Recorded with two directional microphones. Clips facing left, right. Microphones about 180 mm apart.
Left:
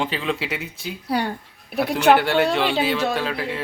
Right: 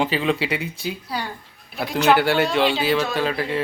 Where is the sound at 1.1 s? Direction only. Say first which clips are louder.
Left 6 dB; 60° left (ahead or behind).